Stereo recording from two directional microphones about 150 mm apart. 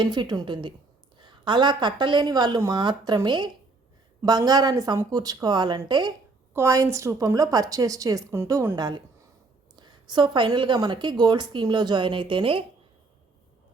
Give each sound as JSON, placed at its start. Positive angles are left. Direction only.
{"t": 0.0, "sound": "a woman's voice", "side_deg": -30}